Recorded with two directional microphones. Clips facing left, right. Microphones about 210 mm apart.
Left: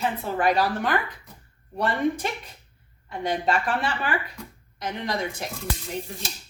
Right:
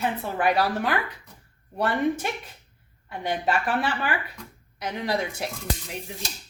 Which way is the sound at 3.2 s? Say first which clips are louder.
Left 1 dB; 5° right (ahead or behind).